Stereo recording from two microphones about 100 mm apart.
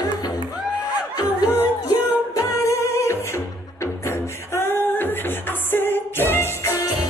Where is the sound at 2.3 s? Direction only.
30° left (ahead or behind).